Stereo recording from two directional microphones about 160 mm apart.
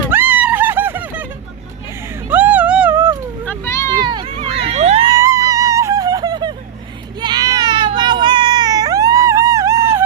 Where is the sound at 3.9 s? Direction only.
30° right (ahead or behind).